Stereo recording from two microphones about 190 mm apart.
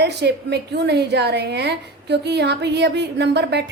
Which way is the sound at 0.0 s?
60° right (ahead or behind).